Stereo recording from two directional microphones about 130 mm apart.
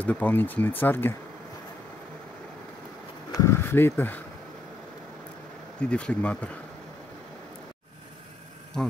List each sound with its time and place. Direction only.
0.0 s speech: 10° left (ahead or behind)
3.3 s a sound: 20° left (ahead or behind)
5.8 s speech: 10° left (ahead or behind)